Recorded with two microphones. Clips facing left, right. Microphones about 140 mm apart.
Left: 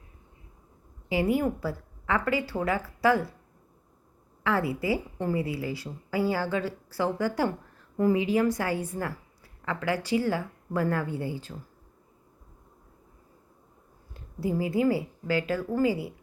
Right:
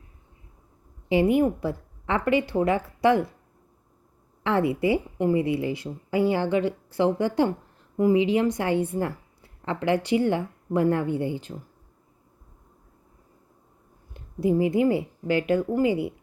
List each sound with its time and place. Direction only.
1.0 s a woman's voice: 25° right (ahead or behind)
4.4 s a woman's voice: 25° right (ahead or behind)
14.1 s a woman's voice: 20° right (ahead or behind)